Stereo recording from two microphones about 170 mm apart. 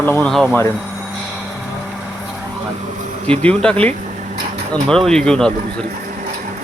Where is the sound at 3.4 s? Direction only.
5° left (ahead or behind).